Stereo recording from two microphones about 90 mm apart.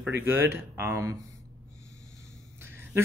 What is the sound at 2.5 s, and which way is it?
Duck, 25° right (ahead or behind).